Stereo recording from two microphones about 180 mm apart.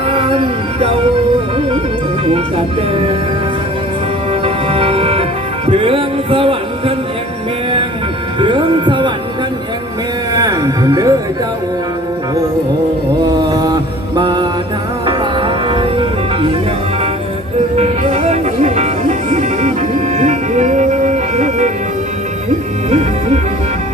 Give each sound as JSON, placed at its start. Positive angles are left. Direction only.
{"t": 0.1, "sound": "music", "side_deg": -30}
{"t": 2.9, "sound": "music", "side_deg": -30}
{"t": 4.4, "sound": "music", "side_deg": -35}
{"t": 8.4, "sound": "music", "side_deg": -25}
{"t": 10.3, "sound": "music", "side_deg": -20}
{"t": 13.5, "sound": "mantra", "side_deg": -20}
{"t": 14.2, "sound": "music", "side_deg": -25}
{"t": 17.7, "sound": "music", "side_deg": -35}
{"t": 22.9, "sound": "music", "side_deg": -35}